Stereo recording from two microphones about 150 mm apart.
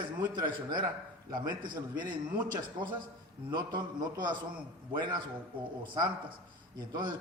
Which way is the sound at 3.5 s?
30° right (ahead or behind).